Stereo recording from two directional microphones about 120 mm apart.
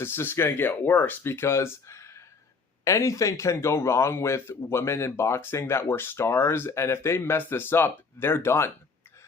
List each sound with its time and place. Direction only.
0.0 s speech: 20° left (ahead or behind)